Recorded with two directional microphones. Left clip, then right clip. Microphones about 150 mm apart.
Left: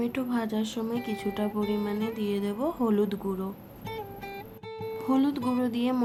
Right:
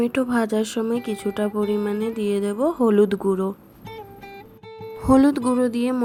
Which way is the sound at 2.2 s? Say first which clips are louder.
Right 8 dB; 35° right (ahead or behind).